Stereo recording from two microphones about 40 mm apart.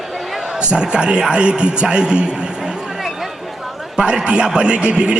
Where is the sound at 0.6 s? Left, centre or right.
Right.